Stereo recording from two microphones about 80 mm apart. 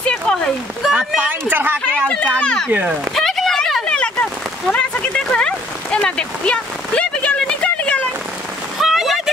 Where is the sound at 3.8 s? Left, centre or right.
Centre.